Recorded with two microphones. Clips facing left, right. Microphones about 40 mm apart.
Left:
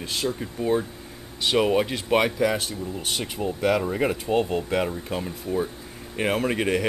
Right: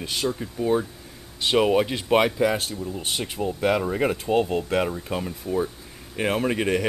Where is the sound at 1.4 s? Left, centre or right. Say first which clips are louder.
Right 1 dB; centre.